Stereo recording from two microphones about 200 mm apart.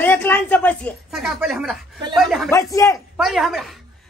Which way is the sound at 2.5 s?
15° left (ahead or behind).